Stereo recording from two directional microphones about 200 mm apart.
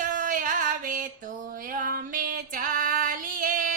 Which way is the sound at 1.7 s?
45° right (ahead or behind).